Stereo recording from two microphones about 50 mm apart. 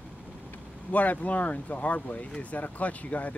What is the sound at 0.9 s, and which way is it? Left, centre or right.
Speech, left.